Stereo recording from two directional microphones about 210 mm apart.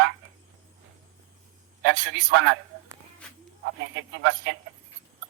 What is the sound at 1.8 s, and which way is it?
Speech, 65° right (ahead or behind).